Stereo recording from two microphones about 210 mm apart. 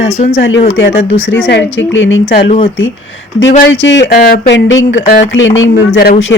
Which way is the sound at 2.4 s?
25° left (ahead or behind).